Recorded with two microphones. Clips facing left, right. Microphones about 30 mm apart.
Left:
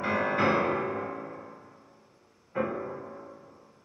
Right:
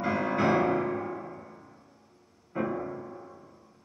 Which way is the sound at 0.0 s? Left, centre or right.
Centre.